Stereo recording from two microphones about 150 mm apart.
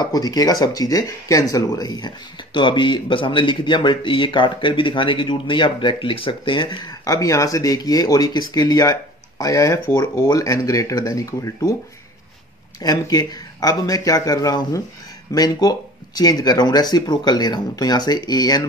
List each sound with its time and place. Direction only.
0.0 s speech: 25° left (ahead or behind)
7.1 s speech: 20° left (ahead or behind)
12.8 s speech: 25° left (ahead or behind)